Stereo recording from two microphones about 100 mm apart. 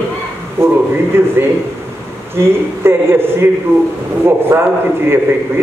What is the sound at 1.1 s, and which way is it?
Speech, 25° right (ahead or behind).